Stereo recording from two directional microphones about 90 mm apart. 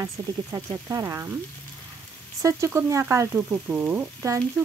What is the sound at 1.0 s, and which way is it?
Frying, 30° right (ahead or behind).